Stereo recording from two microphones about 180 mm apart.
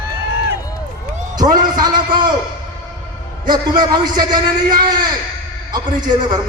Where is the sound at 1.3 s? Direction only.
20° right (ahead or behind).